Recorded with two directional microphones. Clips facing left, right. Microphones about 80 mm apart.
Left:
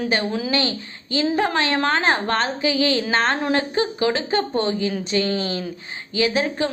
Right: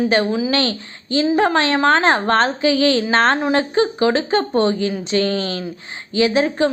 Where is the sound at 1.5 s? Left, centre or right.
Right.